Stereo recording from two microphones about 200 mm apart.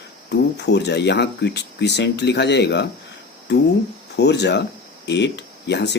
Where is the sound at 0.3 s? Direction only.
60° left (ahead or behind).